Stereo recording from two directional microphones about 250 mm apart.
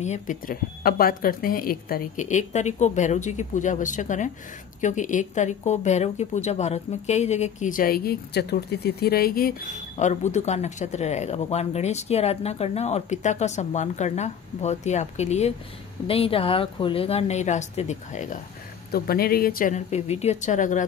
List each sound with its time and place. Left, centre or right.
0.0 s a woman's voice: left